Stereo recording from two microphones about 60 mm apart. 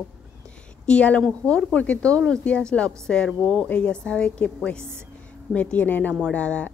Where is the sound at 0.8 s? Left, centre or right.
Centre.